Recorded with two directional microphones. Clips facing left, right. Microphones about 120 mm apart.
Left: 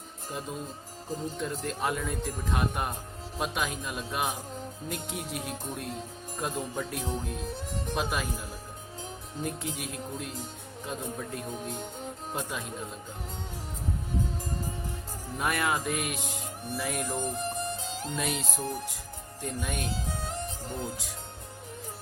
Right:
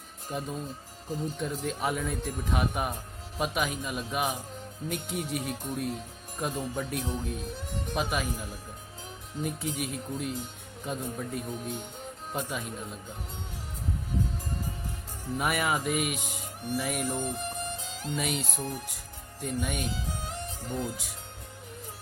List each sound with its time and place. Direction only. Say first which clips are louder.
0.3 s speech: right 2 dB; centre (ahead or behind)
9.4 s speech: right 2 dB; 5° right (ahead or behind)
15.4 s speech: even; 5° right (ahead or behind)
17.2 s music: left 1 dB; 35° left (ahead or behind)
18.2 s speech: even; centre (ahead or behind)
19.9 s music: left 2 dB; 35° left (ahead or behind)